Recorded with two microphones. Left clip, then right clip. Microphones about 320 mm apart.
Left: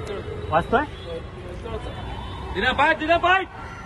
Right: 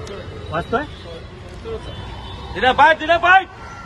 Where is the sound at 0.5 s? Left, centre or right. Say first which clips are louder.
Left 1 dB; left.